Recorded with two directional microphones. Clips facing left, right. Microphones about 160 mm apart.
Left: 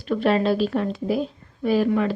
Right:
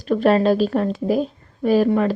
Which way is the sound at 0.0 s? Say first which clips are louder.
Right 4 dB; 40° right (ahead or behind).